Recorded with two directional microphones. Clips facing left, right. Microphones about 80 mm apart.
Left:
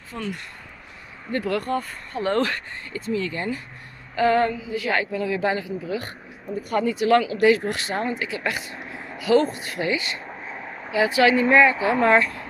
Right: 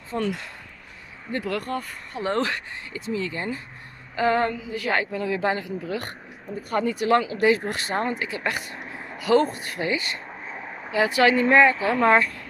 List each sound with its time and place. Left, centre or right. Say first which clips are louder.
0.1 s a woman's voice: right 6 dB; right
1.3 s speech: left 3 dB; centre
2.1 s speech: left 2 dB; centre
4.1 s female singing: left 2 dB; right
4.5 s a woman's voice: left 1 dB; right
8.7 s a sound: left 1 dB; centre
9.2 s a woman's voice: left 1 dB; right
10.2 s a sound: left 1 dB; centre
11.2 s speech: left 1 dB; right
11.7 s speech: left 1 dB; centre
12.2 s speech: left 1 dB; left